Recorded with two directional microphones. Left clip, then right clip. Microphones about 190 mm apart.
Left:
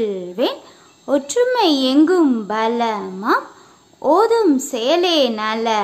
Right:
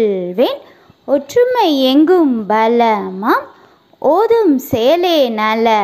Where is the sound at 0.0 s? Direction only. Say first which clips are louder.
Right 6 dB; 20° right (ahead or behind).